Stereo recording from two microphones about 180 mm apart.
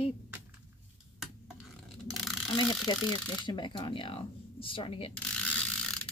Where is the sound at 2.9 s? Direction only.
25° left (ahead or behind).